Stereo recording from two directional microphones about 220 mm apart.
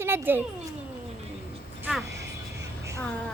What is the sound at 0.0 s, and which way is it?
Speech, 10° right (ahead or behind).